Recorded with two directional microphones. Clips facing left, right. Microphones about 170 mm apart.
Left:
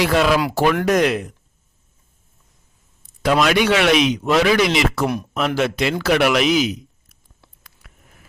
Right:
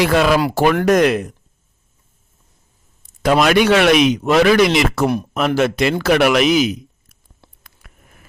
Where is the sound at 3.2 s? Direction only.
50° right (ahead or behind).